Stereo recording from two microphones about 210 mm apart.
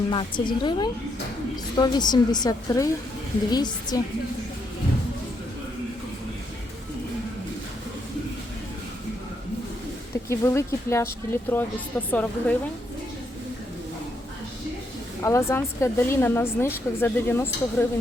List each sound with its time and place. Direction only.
0.1 s a woman's voice: 20° left (ahead or behind)
10.2 s speech: 15° left (ahead or behind)
15.2 s speech: 15° left (ahead or behind)